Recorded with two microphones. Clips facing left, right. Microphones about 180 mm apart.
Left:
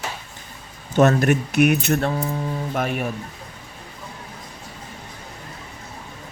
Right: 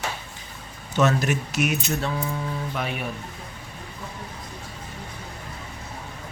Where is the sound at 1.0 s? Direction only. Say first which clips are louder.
Left 5 dB; 55° left (ahead or behind).